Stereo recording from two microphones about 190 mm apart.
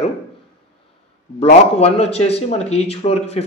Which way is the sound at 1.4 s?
35° left (ahead or behind).